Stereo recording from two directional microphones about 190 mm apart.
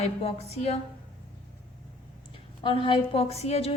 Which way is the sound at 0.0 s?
30° left (ahead or behind).